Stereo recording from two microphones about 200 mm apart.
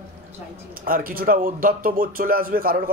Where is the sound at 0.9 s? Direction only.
45° right (ahead or behind).